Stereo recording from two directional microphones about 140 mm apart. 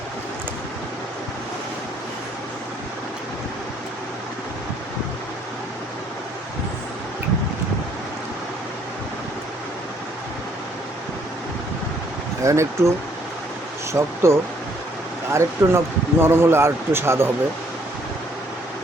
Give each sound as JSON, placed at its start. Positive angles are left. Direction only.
{"t": 12.4, "sound": "speech", "side_deg": -20}
{"t": 13.9, "sound": "a man's voice", "side_deg": -20}